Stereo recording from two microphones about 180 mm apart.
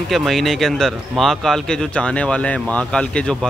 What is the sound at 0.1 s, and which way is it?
Speech, centre (ahead or behind).